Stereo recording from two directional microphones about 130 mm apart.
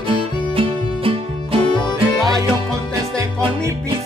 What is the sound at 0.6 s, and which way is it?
Music, 45° right (ahead or behind).